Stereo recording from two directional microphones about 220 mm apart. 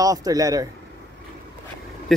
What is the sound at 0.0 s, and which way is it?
Speech, 15° right (ahead or behind).